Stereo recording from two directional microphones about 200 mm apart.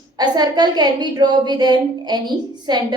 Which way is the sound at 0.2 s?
20° right (ahead or behind).